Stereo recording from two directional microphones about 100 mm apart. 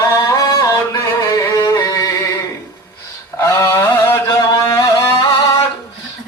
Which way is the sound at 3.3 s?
30° left (ahead or behind).